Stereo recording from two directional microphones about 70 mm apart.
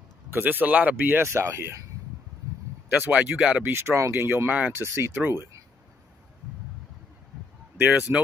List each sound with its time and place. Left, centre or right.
0.3 s speech: right
1.3 s speech: right
3.1 s speech: centre
3.6 s speech: right
4.5 s speech: centre
4.7 s speech: right
5.1 s speech: right
8.1 s speech: right